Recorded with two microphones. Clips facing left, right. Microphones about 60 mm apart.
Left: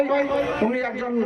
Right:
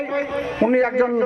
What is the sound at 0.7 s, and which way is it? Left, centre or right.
Speech, right.